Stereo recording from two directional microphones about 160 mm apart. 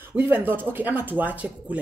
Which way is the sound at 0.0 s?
15° right (ahead or behind).